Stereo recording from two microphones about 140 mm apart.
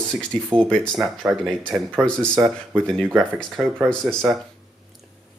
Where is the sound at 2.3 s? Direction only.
15° right (ahead or behind).